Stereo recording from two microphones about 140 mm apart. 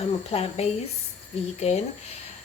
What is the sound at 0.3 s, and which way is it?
Speech, 45° left (ahead or behind).